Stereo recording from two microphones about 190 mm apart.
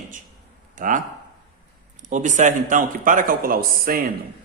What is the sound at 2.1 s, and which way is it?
Speech, 40° right (ahead or behind).